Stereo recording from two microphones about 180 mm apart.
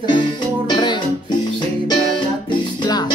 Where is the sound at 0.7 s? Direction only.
25° left (ahead or behind).